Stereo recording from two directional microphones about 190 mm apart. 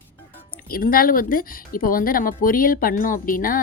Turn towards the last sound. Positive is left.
turn(degrees=45)  # may be behind; listen again after turning